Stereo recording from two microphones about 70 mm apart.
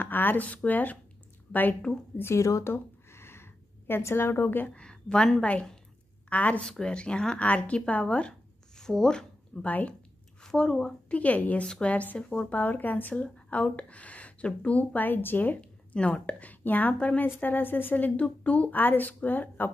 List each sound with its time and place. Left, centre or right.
0.0 s speech: left
2.1 s speech: left
2.6 s a sound: left
4.7 s a woman's voice: centre
9.7 s a woman's voice: left
10.4 s a woman's voice: centre
12.5 s a woman's voice: left
15.6 s a woman's voice: centre